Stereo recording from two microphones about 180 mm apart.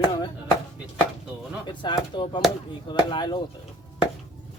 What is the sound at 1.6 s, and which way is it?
Speech, 25° left (ahead or behind).